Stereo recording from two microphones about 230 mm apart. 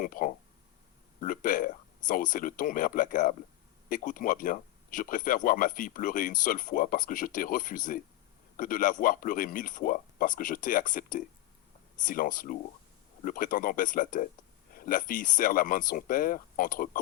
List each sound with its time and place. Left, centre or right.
0.0 s speech: left